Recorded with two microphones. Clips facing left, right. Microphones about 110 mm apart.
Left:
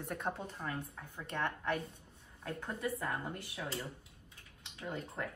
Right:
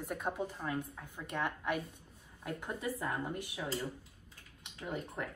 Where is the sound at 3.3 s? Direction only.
25° right (ahead or behind).